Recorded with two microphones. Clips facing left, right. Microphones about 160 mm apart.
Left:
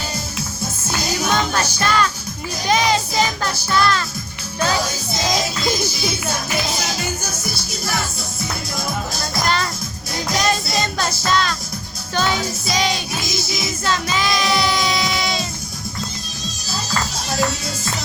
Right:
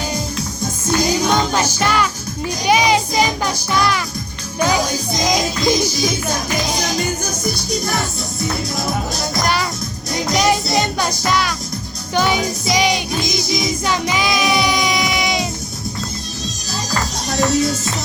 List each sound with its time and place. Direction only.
1.2 s music: 15° right (ahead or behind)
10.2 s music: 15° right (ahead or behind)
11.2 s speech: 15° right (ahead or behind)
12.1 s music: 15° right (ahead or behind)
17.3 s music: centre (ahead or behind)